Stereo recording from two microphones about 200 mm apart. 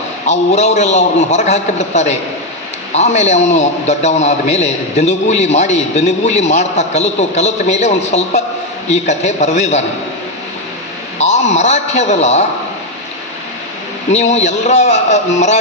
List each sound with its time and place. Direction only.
0.3 s a man's voice: 35° left (ahead or behind)
11.2 s a man's voice: 35° left (ahead or behind)
14.1 s a man's voice: 35° left (ahead or behind)